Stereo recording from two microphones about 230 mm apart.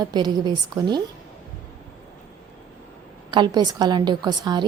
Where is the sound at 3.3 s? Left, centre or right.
Centre.